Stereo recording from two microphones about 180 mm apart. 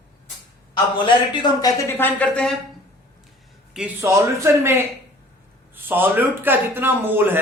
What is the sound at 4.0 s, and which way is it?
Speech, 15° right (ahead or behind).